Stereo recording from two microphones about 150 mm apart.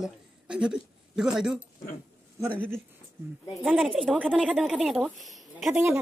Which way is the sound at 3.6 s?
5° right (ahead or behind).